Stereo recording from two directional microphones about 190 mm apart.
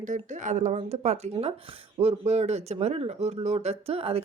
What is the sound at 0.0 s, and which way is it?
Speech, 40° right (ahead or behind).